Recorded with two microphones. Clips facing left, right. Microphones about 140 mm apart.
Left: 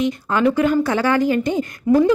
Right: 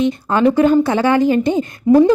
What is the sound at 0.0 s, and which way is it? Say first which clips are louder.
Speech: right 4 dB; 30° right (ahead or behind).